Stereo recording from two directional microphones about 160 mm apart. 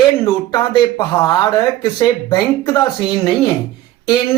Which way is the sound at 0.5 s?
25° left (ahead or behind).